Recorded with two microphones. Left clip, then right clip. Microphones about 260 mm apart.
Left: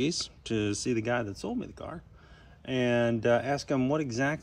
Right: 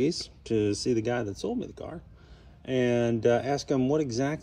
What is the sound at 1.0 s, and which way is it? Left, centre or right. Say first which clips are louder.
Speech: right 1 dB; left.